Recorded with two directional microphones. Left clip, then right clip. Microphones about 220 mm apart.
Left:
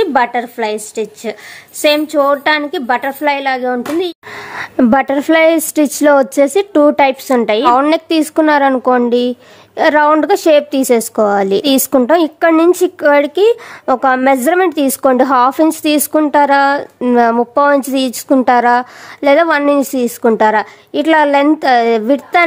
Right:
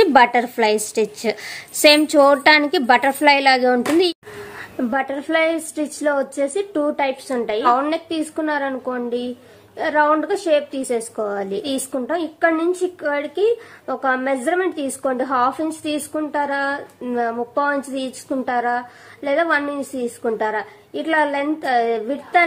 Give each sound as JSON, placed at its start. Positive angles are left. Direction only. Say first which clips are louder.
{"t": 0.0, "sound": "a woman's voice", "louder": "even", "side_deg": 0}
{"t": 4.5, "sound": "a woman's voice", "louder": "left 13 dB", "side_deg": 45}